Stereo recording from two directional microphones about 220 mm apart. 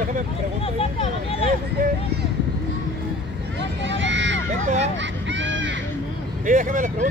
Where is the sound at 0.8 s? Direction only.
25° left (ahead or behind).